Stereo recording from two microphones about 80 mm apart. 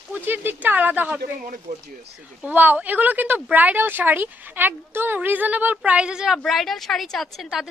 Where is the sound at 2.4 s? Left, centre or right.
Right.